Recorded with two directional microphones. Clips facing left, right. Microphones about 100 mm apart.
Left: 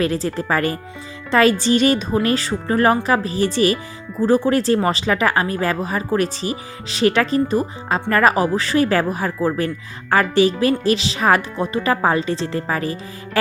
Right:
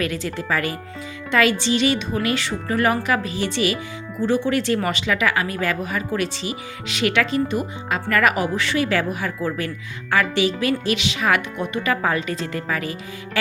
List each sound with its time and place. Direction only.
0.0 s a woman's voice: 35° left (ahead or behind)